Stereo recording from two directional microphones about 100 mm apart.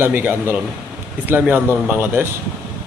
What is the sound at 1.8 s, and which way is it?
Speech, 20° right (ahead or behind).